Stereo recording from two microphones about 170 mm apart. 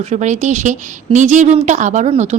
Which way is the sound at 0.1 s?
45° right (ahead or behind).